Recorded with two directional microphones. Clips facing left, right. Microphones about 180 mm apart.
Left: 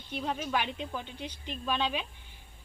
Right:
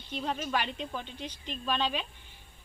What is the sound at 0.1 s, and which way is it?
A woman's voice, 5° left (ahead or behind).